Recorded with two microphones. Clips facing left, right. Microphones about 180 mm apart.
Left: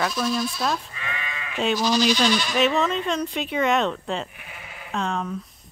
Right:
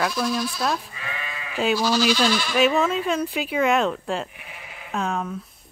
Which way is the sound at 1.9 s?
5° right (ahead or behind).